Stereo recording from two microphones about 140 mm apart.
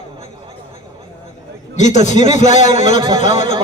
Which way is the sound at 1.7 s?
60° left (ahead or behind).